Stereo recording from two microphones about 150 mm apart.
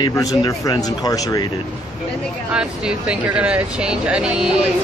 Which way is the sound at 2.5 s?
5° right (ahead or behind).